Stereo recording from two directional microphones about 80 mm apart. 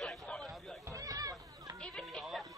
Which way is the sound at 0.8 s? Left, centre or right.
Right.